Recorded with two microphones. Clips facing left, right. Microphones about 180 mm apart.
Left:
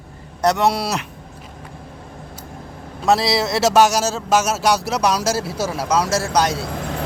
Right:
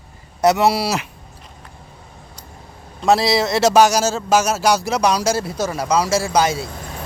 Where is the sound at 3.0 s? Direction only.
Centre (ahead or behind).